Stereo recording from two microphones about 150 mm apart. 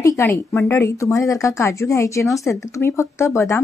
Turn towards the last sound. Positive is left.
turn(degrees=20)  # may be behind; listen again after turning